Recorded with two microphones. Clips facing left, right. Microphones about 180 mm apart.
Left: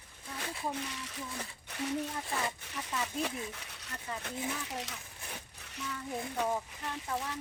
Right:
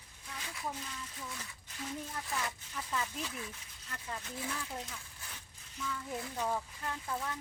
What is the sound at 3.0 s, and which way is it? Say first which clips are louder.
Speech: left 5 dB; 60° left (ahead or behind).